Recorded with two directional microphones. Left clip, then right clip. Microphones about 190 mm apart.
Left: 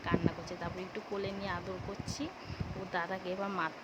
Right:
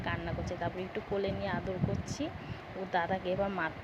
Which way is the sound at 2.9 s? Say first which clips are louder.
Right 5 dB; centre (ahead or behind).